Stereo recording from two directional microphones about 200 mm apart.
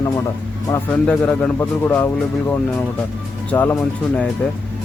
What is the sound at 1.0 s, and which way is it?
Speech, 5° left (ahead or behind).